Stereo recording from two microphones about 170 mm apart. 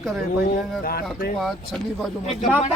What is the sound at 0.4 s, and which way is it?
Speech, 60° left (ahead or behind).